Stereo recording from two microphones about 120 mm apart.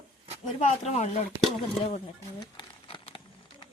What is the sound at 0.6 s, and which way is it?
Speech, 65° left (ahead or behind).